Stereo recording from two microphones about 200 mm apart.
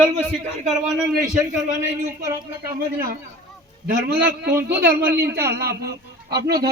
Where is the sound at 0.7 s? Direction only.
Centre (ahead or behind).